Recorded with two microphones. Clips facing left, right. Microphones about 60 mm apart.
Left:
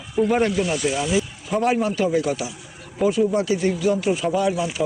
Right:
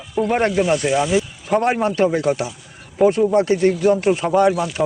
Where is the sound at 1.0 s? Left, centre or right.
Right.